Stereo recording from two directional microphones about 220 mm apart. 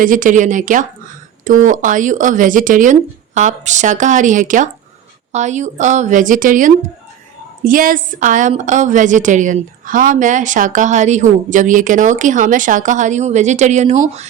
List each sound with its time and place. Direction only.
0.0 s a woman's voice: 35° right (ahead or behind)